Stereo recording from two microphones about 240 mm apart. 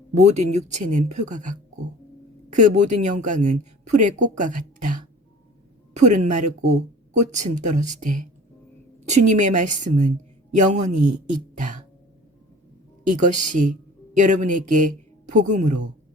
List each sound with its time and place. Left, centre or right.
0.1 s speech: right
6.1 s speech: right
11.5 s throat clearing: right
13.1 s speech: right